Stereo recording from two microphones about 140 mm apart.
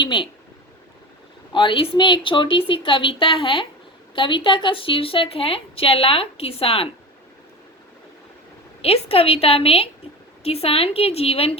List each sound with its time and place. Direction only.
0.0 s a woman's voice: 35° left (ahead or behind)
1.5 s a woman's voice: 40° left (ahead or behind)
8.8 s a woman's voice: 45° left (ahead or behind)